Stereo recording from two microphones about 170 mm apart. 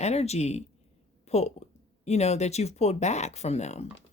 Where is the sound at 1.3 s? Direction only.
40° left (ahead or behind).